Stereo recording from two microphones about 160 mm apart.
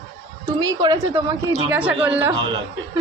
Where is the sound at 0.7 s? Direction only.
25° right (ahead or behind).